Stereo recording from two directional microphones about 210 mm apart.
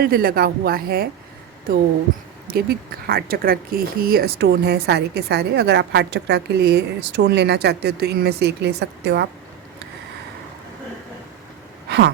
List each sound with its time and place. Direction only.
0.0 s speech: 45° right (ahead or behind)
2.5 s speech: 50° right (ahead or behind)
11.9 s a sound: 55° right (ahead or behind)